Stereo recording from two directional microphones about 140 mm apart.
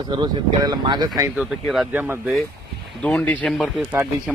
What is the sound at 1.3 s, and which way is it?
Speech, 5° right (ahead or behind).